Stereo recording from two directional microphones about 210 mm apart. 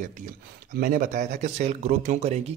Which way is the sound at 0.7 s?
40° right (ahead or behind).